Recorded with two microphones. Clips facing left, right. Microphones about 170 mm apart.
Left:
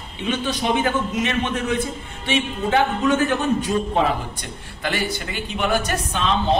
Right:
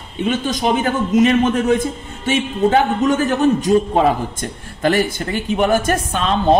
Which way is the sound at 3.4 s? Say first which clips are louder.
Right 7 dB; 40° right (ahead or behind).